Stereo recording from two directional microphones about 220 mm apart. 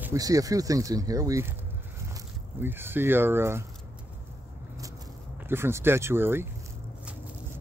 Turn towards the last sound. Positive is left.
turn(degrees=-10)  # may be behind; listen again after turning